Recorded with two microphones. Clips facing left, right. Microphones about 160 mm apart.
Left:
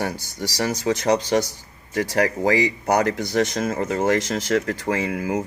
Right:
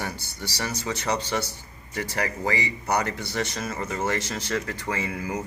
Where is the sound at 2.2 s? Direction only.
90° left.